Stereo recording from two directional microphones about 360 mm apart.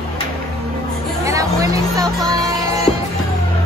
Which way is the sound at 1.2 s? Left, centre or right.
Centre.